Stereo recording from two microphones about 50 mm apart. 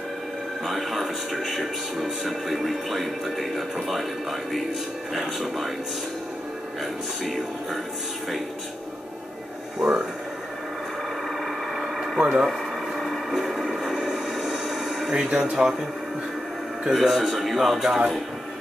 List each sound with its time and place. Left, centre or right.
0.7 s speech: centre
7.2 s speech: centre
9.8 s speech: centre
11.7 s a sound: centre
12.4 s a sound: centre
15.2 s speech: right
16.9 s speech: centre